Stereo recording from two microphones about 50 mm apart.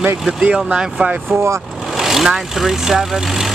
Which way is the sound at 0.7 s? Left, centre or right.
Centre.